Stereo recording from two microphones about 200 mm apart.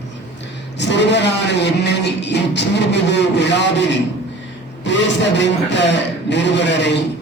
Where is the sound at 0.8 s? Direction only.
60° left (ahead or behind).